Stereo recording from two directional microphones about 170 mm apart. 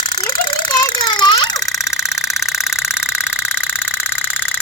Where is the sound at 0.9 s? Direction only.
25° left (ahead or behind).